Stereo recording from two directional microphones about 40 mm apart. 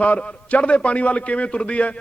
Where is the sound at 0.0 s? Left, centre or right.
Left.